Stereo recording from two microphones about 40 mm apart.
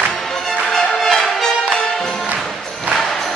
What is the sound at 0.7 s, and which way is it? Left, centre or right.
Music, centre.